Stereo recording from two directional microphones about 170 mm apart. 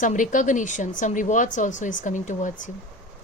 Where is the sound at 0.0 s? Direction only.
50° left (ahead or behind).